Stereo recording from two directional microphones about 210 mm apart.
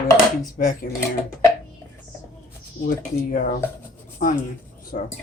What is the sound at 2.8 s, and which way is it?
Speech, 40° left (ahead or behind).